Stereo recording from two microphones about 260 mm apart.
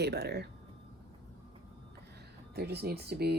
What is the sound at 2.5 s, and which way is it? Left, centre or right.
Speech, right.